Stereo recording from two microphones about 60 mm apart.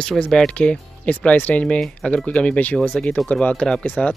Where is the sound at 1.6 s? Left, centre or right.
Centre.